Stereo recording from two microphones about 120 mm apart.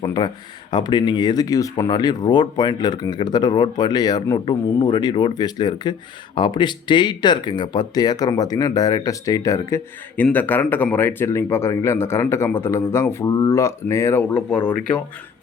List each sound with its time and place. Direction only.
0.7 s speech: 40° left (ahead or behind)
10.3 s speech: 15° left (ahead or behind)
14.7 s speech: 10° left (ahead or behind)